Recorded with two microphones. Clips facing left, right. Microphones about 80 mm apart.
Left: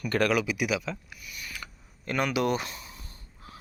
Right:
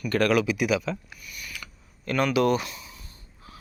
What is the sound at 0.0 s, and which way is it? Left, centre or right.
Speech, left.